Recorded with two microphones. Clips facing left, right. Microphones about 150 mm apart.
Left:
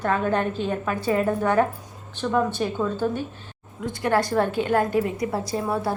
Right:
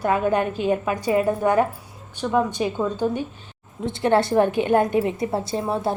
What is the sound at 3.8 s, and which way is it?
A woman's voice, 25° right (ahead or behind).